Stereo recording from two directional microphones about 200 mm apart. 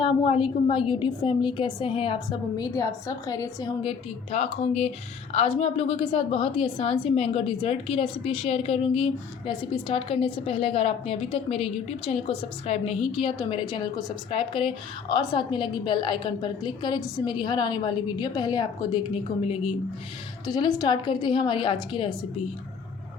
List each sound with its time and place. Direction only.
0.0 s a woman's voice: 25° left (ahead or behind)
4.3 s a woman's voice: 30° left (ahead or behind)
20.5 s a woman's voice: 20° left (ahead or behind)